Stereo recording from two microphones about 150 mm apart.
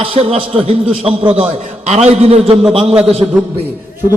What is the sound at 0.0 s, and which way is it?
A man's voice, 40° right (ahead or behind).